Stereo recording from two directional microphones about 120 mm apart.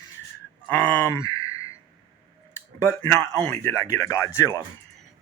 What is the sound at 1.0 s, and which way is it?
Sigh, 25° left (ahead or behind).